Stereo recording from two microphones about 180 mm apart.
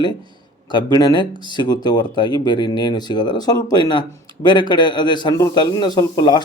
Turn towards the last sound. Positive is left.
turn(degrees=20)  # may be behind; listen again after turning